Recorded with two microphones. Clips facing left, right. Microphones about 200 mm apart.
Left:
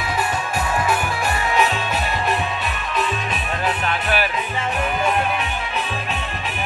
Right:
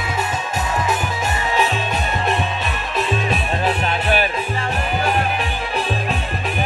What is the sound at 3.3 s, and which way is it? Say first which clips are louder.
Music: right 4 dB; 25° right (ahead or behind).